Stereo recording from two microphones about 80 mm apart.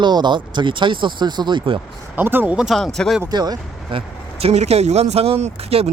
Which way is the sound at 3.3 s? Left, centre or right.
Right.